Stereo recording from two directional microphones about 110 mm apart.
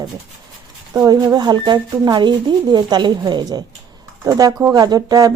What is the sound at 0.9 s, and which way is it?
Speech, 35° right (ahead or behind).